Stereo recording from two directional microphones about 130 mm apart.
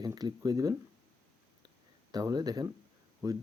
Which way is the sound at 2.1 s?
30° right (ahead or behind).